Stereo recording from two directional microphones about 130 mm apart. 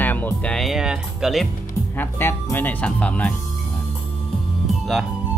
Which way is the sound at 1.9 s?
15° left (ahead or behind).